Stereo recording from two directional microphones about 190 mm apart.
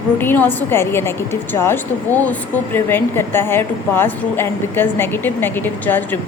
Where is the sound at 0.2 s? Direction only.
10° left (ahead or behind).